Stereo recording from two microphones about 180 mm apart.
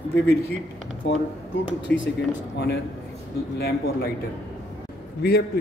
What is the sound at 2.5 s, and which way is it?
A man's voice, 65° left (ahead or behind).